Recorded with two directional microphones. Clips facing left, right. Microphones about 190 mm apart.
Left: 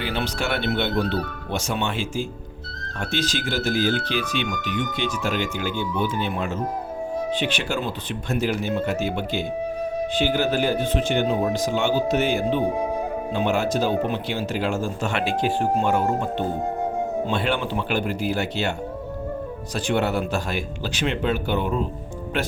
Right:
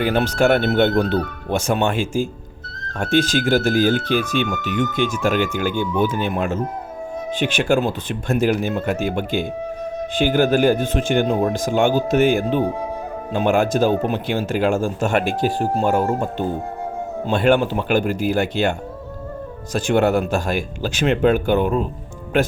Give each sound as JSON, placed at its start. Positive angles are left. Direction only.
{"t": 0.0, "sound": "speech", "side_deg": -45}